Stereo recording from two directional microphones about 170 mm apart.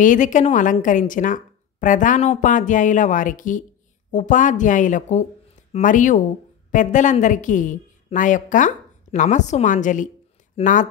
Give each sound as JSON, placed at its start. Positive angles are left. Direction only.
{"t": 0.0, "sound": "a woman's voice", "side_deg": 50}